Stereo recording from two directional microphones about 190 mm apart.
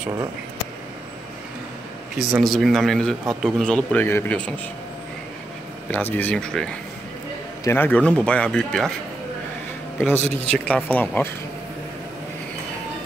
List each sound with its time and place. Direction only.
2.1 s a man's voice: centre (ahead or behind)
5.9 s a man's voice: 10° left (ahead or behind)
9.9 s a man's voice: 10° left (ahead or behind)
10.2 s speech: 35° right (ahead or behind)
10.5 s a man's voice: 5° left (ahead or behind)